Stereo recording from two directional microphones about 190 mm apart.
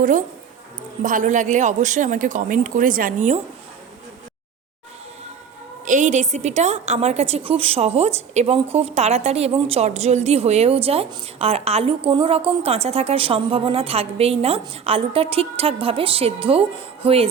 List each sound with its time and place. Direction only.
1.0 s a woman's voice: 40° right (ahead or behind)
5.8 s a woman's voice: 40° right (ahead or behind)